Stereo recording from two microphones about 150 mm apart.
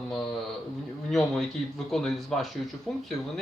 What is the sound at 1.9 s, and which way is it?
Speech, centre (ahead or behind).